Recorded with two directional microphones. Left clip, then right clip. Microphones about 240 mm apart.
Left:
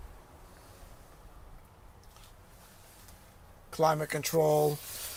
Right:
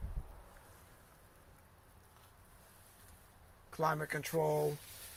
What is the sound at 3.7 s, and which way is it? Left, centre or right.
Speech, centre.